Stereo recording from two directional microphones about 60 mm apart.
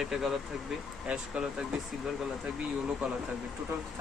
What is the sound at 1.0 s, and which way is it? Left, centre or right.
Speech, centre.